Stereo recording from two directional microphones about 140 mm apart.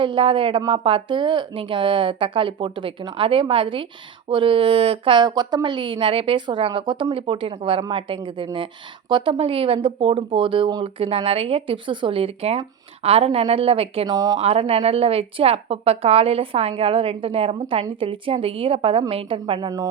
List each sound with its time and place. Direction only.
0.0 s speech: 35° right (ahead or behind)
11.1 s a woman's voice: 45° right (ahead or behind)
14.1 s speech: 30° right (ahead or behind)
14.3 s a woman's voice: 45° right (ahead or behind); by 19.9 s 30° right (ahead or behind)